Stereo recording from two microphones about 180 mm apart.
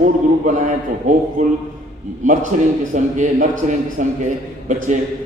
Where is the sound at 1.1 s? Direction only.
45° right (ahead or behind).